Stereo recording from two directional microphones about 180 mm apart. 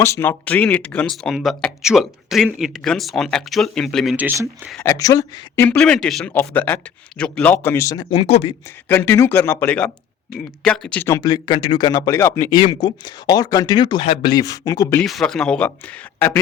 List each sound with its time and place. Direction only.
0.0 s speech: 15° left (ahead or behind); by 4.7 s 10° right (ahead or behind)
4.8 s speech: 15° left (ahead or behind)
5.7 s speech: 5° left (ahead or behind)
8.1 s speech: 30° left (ahead or behind)
8.9 s speech: 10° left (ahead or behind)
11.2 s speech: 25° left (ahead or behind)
15.0 s speech: centre (ahead or behind)